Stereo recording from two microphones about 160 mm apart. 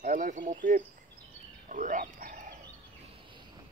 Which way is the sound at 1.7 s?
55° right (ahead or behind).